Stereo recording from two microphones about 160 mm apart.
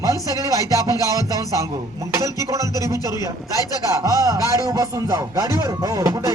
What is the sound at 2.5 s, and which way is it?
Music, 20° right (ahead or behind).